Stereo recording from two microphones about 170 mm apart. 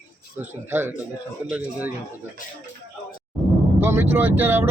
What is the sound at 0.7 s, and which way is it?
Speech, 15° right (ahead or behind).